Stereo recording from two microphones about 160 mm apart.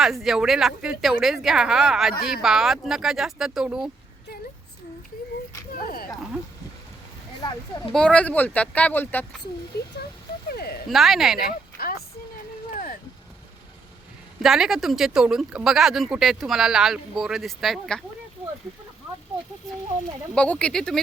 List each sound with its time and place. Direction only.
0.0 s speech: centre (ahead or behind)
5.8 s a sound: 65° left (ahead or behind)
7.9 s speech: 5° left (ahead or behind)
9.7 s speech: 90° left
10.5 s a sound: 75° left (ahead or behind)
10.8 s speech: centre (ahead or behind)
11.8 s a sound: 70° left (ahead or behind)
14.4 s speech: centre (ahead or behind)
20.3 s speech: 5° left (ahead or behind)